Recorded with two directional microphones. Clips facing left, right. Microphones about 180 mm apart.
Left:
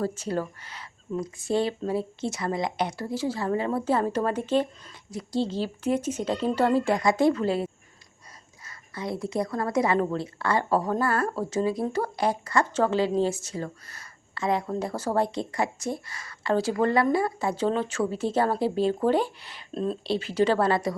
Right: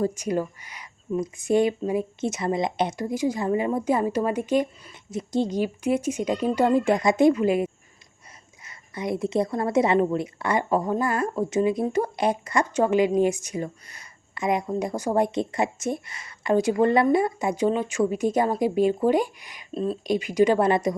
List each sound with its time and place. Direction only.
0.0 s a woman's voice: 15° right (ahead or behind)
19.7 s speech: centre (ahead or behind)
20.1 s a woman's voice: 15° right (ahead or behind)